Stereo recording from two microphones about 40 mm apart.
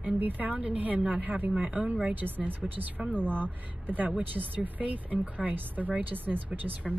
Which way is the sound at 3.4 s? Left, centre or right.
Right.